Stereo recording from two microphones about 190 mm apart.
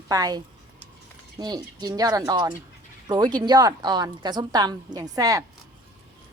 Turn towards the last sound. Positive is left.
turn(degrees=-20)  # may be behind; listen again after turning